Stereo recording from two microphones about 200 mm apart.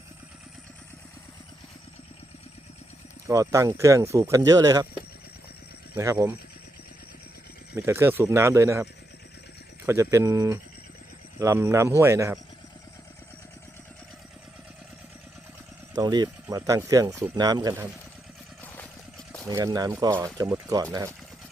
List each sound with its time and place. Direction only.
3.2 s speech: 15° right (ahead or behind)
5.9 s speech: 15° right (ahead or behind)
7.7 s speech: 10° right (ahead or behind)
16.0 s speech: 20° right (ahead or behind)
19.5 s speech: 20° right (ahead or behind)